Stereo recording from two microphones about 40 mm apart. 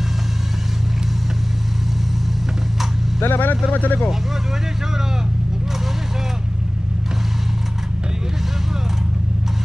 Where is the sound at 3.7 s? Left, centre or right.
Left.